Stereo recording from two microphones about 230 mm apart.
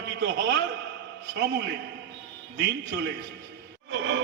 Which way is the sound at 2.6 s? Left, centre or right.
Right.